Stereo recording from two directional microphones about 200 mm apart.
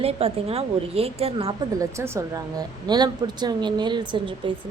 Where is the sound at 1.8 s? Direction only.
15° right (ahead or behind).